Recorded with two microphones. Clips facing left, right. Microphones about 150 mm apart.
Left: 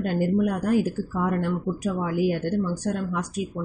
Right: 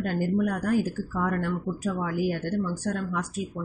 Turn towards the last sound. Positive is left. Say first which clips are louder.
# left 2 dB
turn(degrees=20)  # may be behind; listen again after turning